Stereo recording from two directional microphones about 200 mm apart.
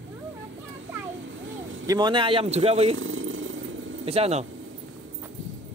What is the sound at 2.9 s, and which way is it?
Purr, 85° right.